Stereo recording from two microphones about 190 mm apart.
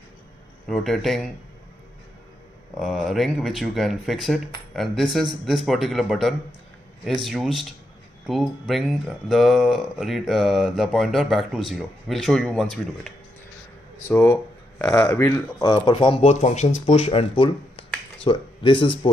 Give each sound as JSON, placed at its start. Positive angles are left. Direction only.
{"t": 0.7, "sound": "speech", "side_deg": 0}
{"t": 2.8, "sound": "speech", "side_deg": 0}